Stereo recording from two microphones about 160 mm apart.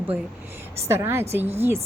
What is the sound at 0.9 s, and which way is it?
Speech, 15° right (ahead or behind).